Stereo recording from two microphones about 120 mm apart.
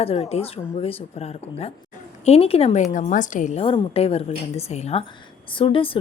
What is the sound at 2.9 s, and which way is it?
Speech, 90° left.